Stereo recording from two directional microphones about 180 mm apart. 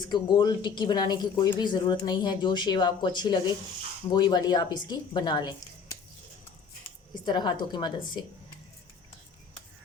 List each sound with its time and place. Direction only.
0.0 s speech: 25° left (ahead or behind)
7.3 s speech: 25° left (ahead or behind)